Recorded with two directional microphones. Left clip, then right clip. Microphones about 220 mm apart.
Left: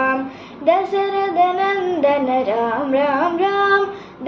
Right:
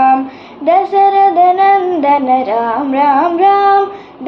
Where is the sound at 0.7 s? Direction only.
15° right (ahead or behind).